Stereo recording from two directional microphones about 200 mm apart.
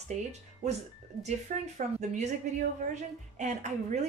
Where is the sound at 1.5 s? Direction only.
35° right (ahead or behind).